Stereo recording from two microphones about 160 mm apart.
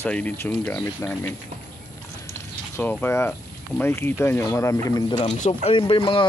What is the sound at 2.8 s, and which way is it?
Speech, 10° left (ahead or behind).